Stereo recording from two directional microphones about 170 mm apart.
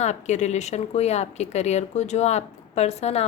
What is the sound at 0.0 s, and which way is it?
A woman's voice, 45° left (ahead or behind).